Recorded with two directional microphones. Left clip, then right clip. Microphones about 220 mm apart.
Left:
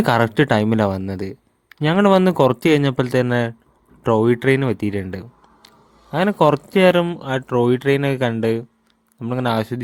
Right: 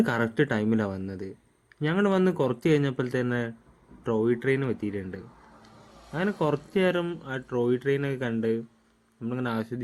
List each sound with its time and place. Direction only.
0.0 s a man's voice: 45° left (ahead or behind)